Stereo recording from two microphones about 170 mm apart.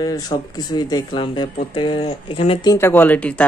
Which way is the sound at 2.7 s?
10° left (ahead or behind).